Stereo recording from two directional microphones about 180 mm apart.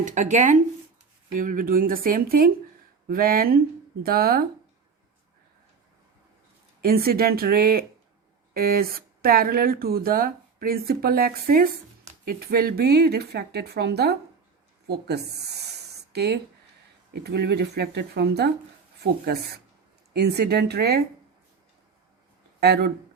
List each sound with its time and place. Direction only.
0.0 s speech: 40° right (ahead or behind)
6.8 s speech: 55° right (ahead or behind)
22.6 s speech: 65° right (ahead or behind)